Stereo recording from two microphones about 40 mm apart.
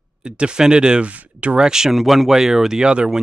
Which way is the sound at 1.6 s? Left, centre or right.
Centre.